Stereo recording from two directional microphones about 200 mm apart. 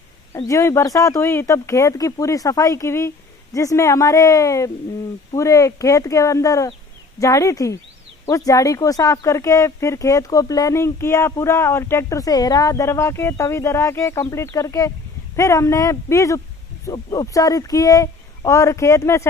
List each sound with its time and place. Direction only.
0.3 s speech: 15° left (ahead or behind)